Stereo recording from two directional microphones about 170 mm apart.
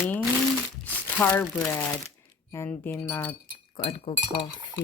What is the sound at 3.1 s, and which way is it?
Speech, 10° left (ahead or behind).